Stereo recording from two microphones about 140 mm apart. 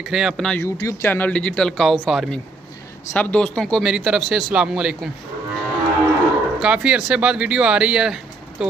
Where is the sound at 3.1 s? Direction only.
10° left (ahead or behind); by 5.1 s 5° right (ahead or behind).